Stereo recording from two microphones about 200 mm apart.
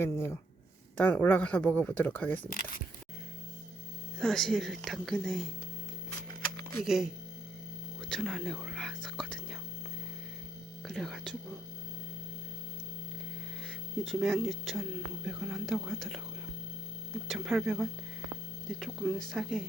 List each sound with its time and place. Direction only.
0.0 s speech: 15° left (ahead or behind)
2.5 s speech: 45° left (ahead or behind)
4.2 s speech: centre (ahead or behind)
6.8 s speech: centre (ahead or behind)
8.1 s whispering: centre (ahead or behind)
10.8 s speech: centre (ahead or behind)
14.0 s speech: centre (ahead or behind)
17.2 s speech: centre (ahead or behind)